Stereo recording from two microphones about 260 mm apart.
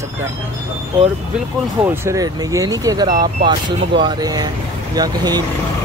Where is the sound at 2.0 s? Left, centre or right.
Centre.